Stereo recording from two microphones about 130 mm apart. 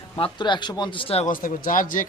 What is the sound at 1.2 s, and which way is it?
Speech, 90° left.